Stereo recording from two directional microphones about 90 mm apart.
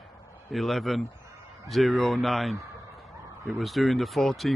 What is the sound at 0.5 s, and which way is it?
Speech, centre (ahead or behind).